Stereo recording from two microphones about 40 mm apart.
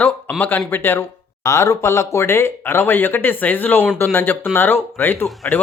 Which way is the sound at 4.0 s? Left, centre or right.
Left.